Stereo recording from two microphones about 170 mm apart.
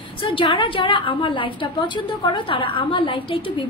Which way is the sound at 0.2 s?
30° left (ahead or behind).